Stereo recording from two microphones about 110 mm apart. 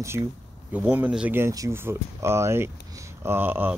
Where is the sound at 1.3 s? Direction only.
25° right (ahead or behind).